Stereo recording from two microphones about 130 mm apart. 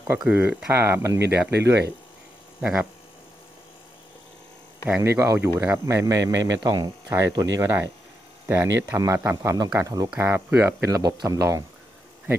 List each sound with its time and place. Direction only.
0.0 s speech: 15° right (ahead or behind)
5.0 s speech: 20° right (ahead or behind)